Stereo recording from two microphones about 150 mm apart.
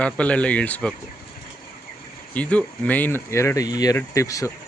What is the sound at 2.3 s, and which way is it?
Speech, 10° left (ahead or behind).